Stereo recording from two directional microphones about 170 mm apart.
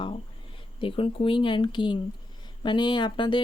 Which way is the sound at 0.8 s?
30° left (ahead or behind).